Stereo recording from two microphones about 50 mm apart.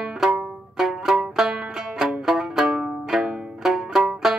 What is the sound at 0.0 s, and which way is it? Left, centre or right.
Music, centre.